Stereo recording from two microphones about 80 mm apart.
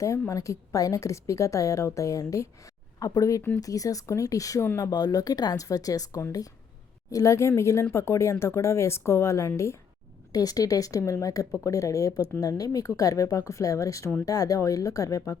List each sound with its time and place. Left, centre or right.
0.3 s a woman's voice: left
10.3 s speech: left